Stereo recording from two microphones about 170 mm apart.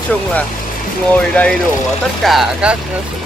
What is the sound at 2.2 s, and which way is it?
Speech, centre (ahead or behind).